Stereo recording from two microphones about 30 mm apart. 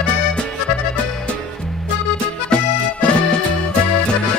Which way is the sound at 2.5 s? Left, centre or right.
Left.